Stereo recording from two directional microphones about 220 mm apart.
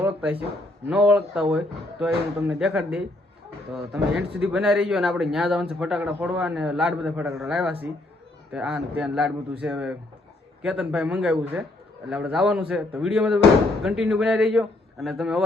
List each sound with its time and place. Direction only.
0.0 s a man's voice: 5° right (ahead or behind)